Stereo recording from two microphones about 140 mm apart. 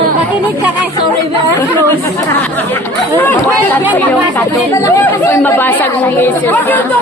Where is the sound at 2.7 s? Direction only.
15° left (ahead or behind).